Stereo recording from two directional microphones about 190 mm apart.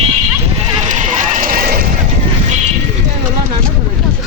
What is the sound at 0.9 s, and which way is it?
Run, 40° right (ahead or behind).